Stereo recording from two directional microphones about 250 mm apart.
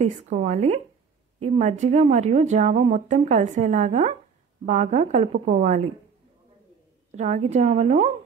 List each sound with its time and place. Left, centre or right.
0.0 s speech: right
7.1 s speech: right